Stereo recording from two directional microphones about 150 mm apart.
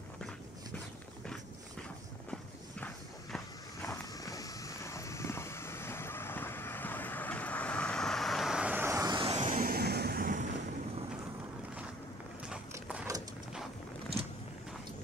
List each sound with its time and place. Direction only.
2.8 s clip-clop: centre (ahead or behind)
3.8 s a sound: 20° left (ahead or behind); by 9.2 s 20° right (ahead or behind)
9.2 s vehicle: 35° right (ahead or behind)
9.5 s vehicle: 70° right (ahead or behind)